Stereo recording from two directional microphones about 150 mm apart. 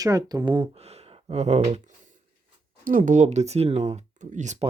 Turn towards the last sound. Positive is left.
turn(degrees=-55)  # may be behind; listen again after turning